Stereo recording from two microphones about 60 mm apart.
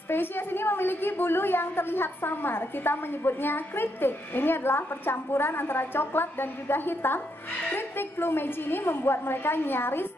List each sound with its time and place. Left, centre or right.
0.1 s a woman's voice: left